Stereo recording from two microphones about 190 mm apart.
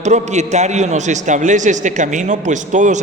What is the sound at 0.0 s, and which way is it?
A man's voice, 40° right (ahead or behind).